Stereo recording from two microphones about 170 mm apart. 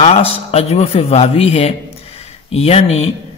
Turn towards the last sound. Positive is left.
turn(degrees=35)  # may be behind; listen again after turning